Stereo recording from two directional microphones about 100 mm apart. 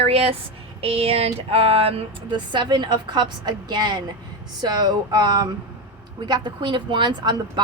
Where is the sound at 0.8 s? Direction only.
70° right (ahead or behind).